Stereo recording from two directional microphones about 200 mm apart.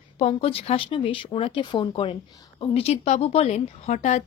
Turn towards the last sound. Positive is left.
turn(degrees=35)  # may be behind; listen again after turning